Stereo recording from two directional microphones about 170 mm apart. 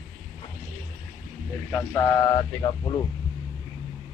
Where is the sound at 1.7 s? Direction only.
15° left (ahead or behind).